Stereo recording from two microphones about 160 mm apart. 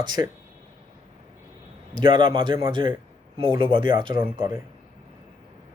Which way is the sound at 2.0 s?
30° right (ahead or behind).